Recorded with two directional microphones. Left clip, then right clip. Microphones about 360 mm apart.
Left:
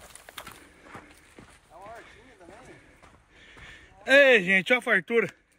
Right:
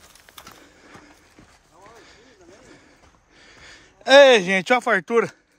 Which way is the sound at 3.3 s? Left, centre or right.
Right.